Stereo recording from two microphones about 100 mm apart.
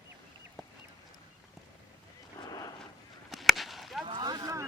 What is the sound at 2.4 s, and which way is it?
Horse, 35° left (ahead or behind).